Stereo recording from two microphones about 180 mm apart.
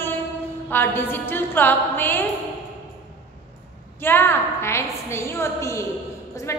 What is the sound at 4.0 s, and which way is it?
A woman's voice, 10° left (ahead or behind).